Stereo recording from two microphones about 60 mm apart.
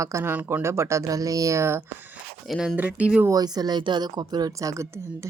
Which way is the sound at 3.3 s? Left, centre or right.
Right.